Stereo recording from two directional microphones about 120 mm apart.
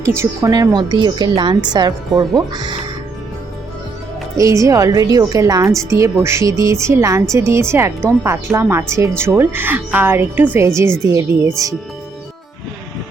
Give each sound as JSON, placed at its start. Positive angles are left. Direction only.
{"t": 0.0, "sound": "a woman's voice", "side_deg": -25}
{"t": 4.4, "sound": "a woman's voice", "side_deg": -25}